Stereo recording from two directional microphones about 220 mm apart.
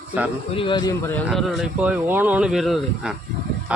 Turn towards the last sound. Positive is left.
turn(degrees=0)  # may be behind; listen again after turning